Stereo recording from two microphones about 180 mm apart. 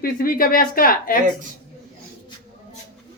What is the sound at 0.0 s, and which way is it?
Speech, 55° left (ahead or behind).